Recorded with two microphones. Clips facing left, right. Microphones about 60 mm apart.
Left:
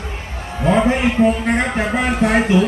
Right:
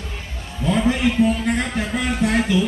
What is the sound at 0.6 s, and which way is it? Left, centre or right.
A man's voice, left.